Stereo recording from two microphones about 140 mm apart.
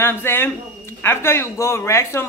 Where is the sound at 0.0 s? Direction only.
15° left (ahead or behind).